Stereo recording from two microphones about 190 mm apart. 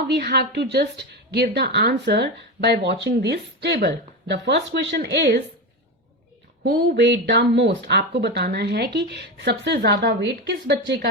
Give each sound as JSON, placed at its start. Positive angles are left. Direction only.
{"t": 0.2, "sound": "a woman's voice", "side_deg": -60}
{"t": 6.6, "sound": "a woman's voice", "side_deg": -65}